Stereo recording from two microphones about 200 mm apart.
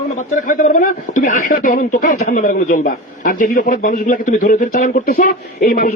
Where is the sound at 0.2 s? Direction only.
40° left (ahead or behind).